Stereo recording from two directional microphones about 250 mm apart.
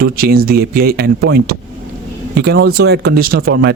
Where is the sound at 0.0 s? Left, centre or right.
Right.